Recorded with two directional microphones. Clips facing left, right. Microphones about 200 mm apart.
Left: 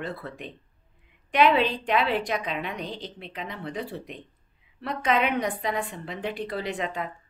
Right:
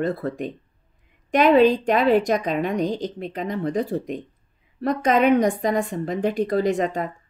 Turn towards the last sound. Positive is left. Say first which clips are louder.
# right 9 dB
turn(degrees=-45)  # may be behind; listen again after turning